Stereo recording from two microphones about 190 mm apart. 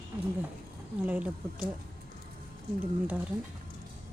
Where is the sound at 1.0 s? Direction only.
5° right (ahead or behind).